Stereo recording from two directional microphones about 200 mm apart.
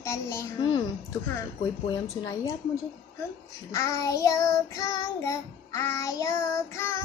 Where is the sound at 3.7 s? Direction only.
15° left (ahead or behind).